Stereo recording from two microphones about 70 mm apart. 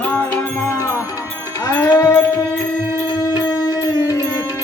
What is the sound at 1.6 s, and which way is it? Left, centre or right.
Music, left.